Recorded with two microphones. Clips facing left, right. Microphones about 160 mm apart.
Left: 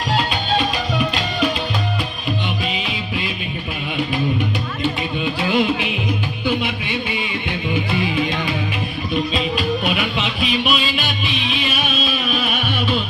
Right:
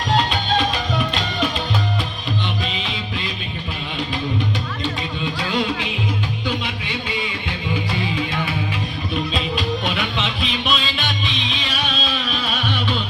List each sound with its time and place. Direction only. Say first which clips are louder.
2.7 s music: left 2 dB; 10° left (ahead or behind)
5.4 s music: left 5 dB; 15° left (ahead or behind)
9.3 s music: left 3 dB; 5° left (ahead or behind)